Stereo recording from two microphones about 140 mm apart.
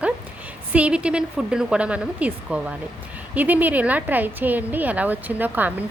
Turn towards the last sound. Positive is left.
turn(degrees=-10)  # may be behind; listen again after turning